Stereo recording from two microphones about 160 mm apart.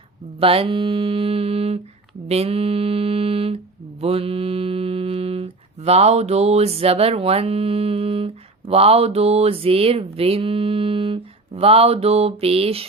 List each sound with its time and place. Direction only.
0.3 s mantra: 35° right (ahead or behind)